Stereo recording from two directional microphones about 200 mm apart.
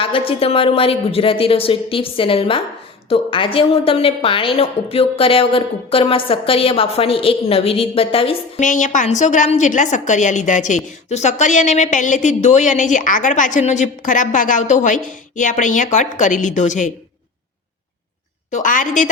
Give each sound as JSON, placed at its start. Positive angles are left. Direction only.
{"t": 0.0, "sound": "a woman's voice", "side_deg": 25}
{"t": 8.6, "sound": "a woman's voice", "side_deg": 40}
{"t": 18.5, "sound": "a woman's voice", "side_deg": 40}